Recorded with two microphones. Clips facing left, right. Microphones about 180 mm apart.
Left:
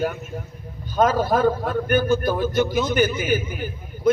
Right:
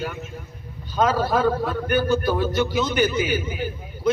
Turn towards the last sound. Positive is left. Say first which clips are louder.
# left 2 dB
turn(degrees=50)  # may be behind; listen again after turning